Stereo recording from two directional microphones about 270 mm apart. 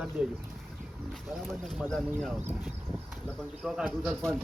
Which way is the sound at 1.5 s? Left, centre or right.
Centre.